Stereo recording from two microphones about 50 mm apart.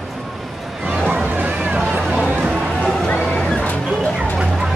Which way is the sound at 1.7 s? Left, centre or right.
Right.